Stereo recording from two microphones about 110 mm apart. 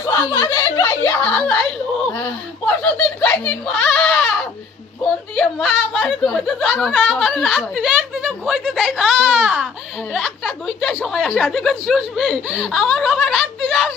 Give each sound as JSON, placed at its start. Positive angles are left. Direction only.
{"t": 0.0, "sound": "speech", "side_deg": 30}
{"t": 3.2, "sound": "a child's voice", "side_deg": 10}
{"t": 5.4, "sound": "speech", "side_deg": 0}
{"t": 10.2, "sound": "speech", "side_deg": 0}